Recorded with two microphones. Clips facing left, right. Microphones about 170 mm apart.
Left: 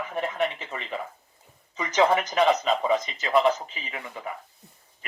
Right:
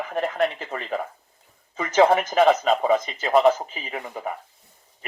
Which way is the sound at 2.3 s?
50° right (ahead or behind).